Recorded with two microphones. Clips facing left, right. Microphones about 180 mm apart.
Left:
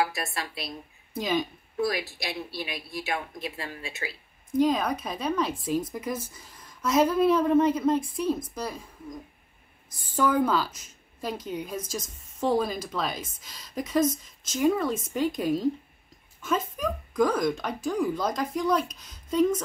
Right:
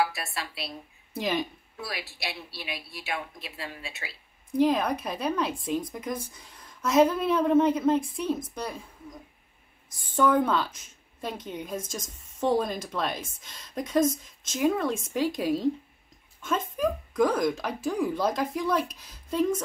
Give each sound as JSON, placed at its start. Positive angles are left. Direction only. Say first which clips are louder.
{"t": 0.0, "sound": "a woman's voice", "louder": "even", "side_deg": 45}
{"t": 1.1, "sound": "speech", "louder": "left 1 dB", "side_deg": 0}
{"t": 1.8, "sound": "a woman's voice", "louder": "left 9 dB", "side_deg": 45}
{"t": 4.6, "sound": "speech", "louder": "even", "side_deg": 0}
{"t": 9.9, "sound": "speech", "louder": "right 1 dB", "side_deg": 0}